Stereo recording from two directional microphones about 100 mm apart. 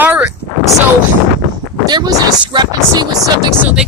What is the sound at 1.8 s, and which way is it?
Speech, 45° right (ahead or behind).